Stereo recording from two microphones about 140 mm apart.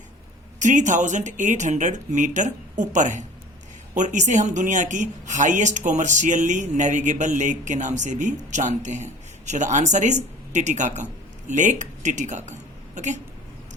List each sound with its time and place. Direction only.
0.6 s speech: 60° right (ahead or behind)